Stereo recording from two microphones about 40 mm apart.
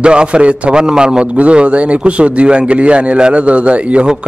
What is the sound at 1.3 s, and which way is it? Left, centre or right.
A man's voice, right.